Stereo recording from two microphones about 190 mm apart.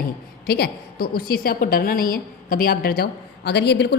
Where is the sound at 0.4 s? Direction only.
55° left (ahead or behind).